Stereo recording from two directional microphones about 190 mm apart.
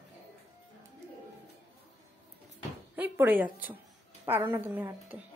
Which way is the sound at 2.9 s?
10° right (ahead or behind).